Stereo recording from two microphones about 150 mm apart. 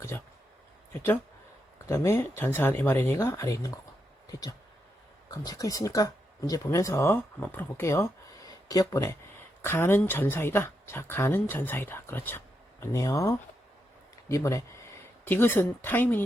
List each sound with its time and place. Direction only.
1.9 s speech: 20° left (ahead or behind)